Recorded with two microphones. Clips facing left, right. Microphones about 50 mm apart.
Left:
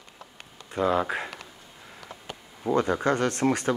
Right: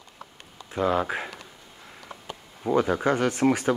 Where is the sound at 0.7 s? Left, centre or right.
Centre.